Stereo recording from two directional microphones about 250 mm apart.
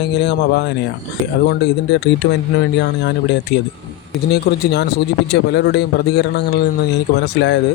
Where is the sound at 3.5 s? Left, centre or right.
Left.